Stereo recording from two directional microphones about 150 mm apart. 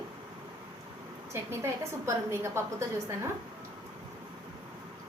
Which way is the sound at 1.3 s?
15° right (ahead or behind).